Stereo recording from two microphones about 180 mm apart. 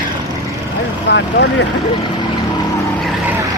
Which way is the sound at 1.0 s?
80° left.